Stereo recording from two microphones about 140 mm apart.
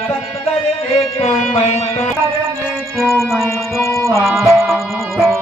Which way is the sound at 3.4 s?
20° left (ahead or behind).